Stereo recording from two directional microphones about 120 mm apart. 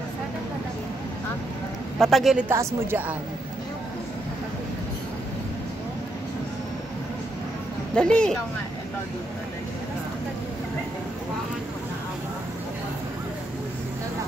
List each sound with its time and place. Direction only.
2.0 s a woman's voice: centre (ahead or behind)
2.4 s a woman's voice: 20° right (ahead or behind)
7.9 s speech: 5° left (ahead or behind)